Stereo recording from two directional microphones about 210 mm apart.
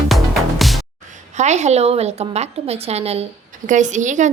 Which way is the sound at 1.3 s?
35° right (ahead or behind).